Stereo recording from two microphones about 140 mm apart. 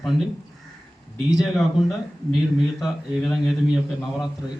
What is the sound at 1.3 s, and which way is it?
A man's voice, centre (ahead or behind).